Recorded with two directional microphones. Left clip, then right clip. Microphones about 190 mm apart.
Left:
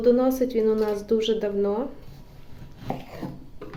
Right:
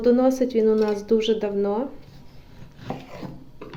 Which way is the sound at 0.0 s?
20° right (ahead or behind).